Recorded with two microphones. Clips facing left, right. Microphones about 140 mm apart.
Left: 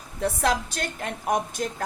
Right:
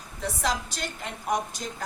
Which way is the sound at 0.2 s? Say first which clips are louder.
Left 5 dB; 55° left (ahead or behind).